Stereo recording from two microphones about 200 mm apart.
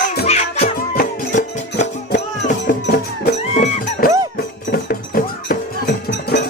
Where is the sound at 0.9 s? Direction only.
45° left (ahead or behind).